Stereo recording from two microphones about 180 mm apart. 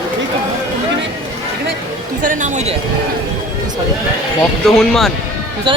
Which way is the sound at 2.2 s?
45° right (ahead or behind).